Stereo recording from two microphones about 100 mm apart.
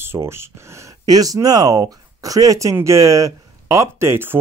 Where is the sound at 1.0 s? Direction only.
40° right (ahead or behind).